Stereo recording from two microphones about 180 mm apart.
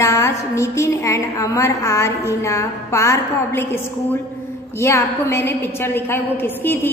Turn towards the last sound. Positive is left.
turn(degrees=10)  # may be behind; listen again after turning